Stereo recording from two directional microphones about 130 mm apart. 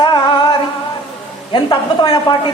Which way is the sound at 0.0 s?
35° left (ahead or behind).